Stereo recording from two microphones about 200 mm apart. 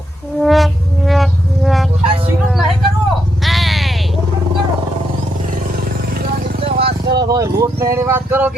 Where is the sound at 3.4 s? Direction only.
Centre (ahead or behind).